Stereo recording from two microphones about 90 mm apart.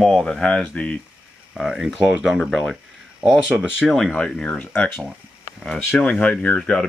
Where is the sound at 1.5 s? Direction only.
5° right (ahead or behind).